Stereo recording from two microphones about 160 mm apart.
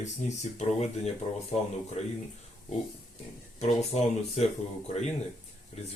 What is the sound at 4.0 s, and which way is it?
Speech, 40° left (ahead or behind).